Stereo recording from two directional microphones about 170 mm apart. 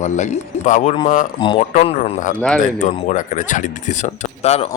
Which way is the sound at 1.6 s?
40° left (ahead or behind).